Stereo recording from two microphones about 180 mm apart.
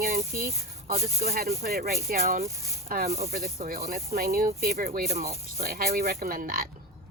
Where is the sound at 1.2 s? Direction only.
60° right (ahead or behind).